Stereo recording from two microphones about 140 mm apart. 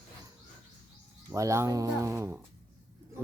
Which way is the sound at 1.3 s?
20° right (ahead or behind).